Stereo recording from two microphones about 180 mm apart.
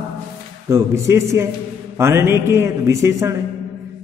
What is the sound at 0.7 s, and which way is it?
A man's voice, 15° right (ahead or behind).